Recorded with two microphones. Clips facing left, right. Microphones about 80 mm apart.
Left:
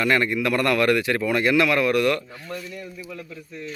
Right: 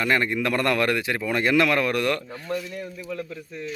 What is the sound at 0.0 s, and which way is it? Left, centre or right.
Speech, right.